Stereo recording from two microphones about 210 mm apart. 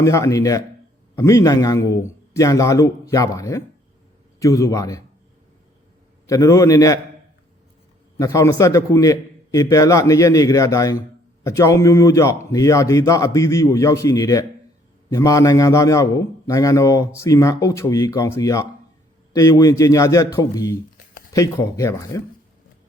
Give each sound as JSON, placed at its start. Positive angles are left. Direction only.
{"t": 0.0, "sound": "a man's voice", "side_deg": 15}
{"t": 6.2, "sound": "a man's voice", "side_deg": 15}
{"t": 8.2, "sound": "a man's voice", "side_deg": 15}